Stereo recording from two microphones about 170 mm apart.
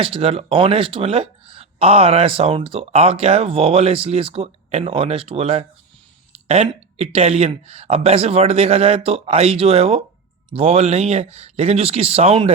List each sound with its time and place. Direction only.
0.0 s speech: 35° right (ahead or behind)